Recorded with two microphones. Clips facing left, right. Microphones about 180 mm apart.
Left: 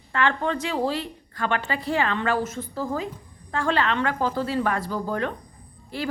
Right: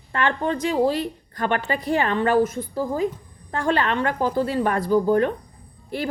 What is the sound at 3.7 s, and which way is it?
Speech, 50° right (ahead or behind).